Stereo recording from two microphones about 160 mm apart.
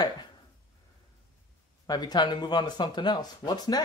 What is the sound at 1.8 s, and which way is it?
Speech, 25° left (ahead or behind).